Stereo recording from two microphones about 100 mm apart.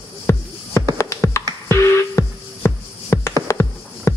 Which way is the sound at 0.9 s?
30° left (ahead or behind).